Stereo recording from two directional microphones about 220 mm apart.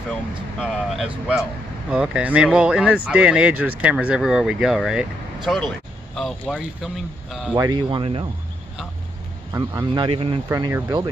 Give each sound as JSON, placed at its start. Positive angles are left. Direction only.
{"t": 0.6, "sound": "speech", "side_deg": -5}
{"t": 7.5, "sound": "speech", "side_deg": -15}
{"t": 9.5, "sound": "speech", "side_deg": -15}